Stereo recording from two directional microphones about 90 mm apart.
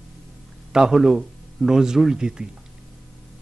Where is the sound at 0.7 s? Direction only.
5° right (ahead or behind).